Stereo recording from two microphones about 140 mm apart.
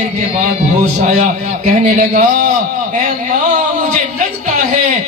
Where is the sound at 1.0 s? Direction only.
60° right (ahead or behind).